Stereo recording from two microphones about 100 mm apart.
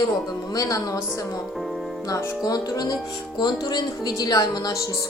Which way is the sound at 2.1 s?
35° left (ahead or behind).